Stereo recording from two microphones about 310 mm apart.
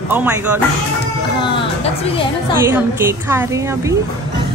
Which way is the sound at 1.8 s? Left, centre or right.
Centre.